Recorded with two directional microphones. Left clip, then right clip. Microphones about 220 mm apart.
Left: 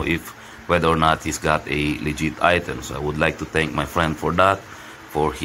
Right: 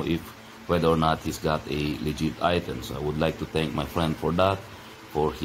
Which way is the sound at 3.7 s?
35° left (ahead or behind).